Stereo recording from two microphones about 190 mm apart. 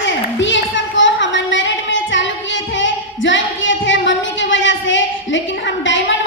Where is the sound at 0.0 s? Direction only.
75° left (ahead or behind).